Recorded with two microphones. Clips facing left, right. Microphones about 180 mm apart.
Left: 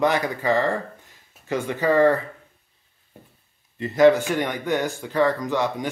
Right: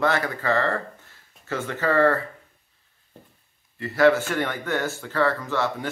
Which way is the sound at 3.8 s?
20° left (ahead or behind).